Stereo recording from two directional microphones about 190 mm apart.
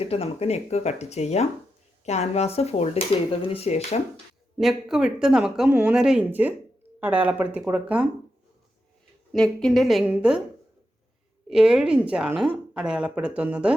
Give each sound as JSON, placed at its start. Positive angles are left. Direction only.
{"t": 0.0, "sound": "speech", "side_deg": 30}
{"t": 4.5, "sound": "a woman's voice", "side_deg": 0}
{"t": 9.3, "sound": "a woman's voice", "side_deg": 5}
{"t": 11.4, "sound": "a woman's voice", "side_deg": -5}